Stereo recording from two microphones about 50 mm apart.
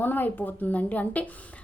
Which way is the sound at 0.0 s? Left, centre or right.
Left.